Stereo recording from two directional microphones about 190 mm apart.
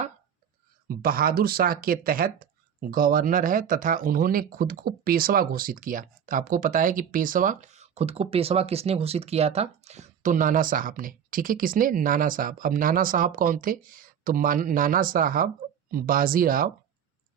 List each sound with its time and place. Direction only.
0.9 s speech: 50° right (ahead or behind)